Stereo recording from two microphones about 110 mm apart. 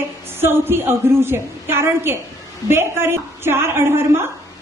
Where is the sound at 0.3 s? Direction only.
20° right (ahead or behind).